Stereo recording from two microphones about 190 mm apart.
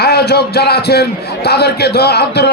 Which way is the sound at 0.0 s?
55° left (ahead or behind).